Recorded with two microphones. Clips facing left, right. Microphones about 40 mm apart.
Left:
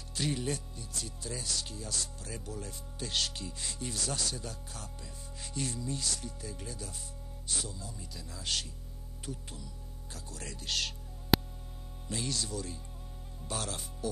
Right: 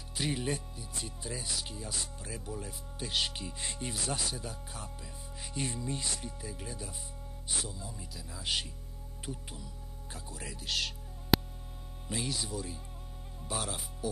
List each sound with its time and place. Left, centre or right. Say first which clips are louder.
0.1 s speech: even; centre
6.4 s speech: right 1 dB; centre
10.4 s music: even; centre
12.1 s speech: even; centre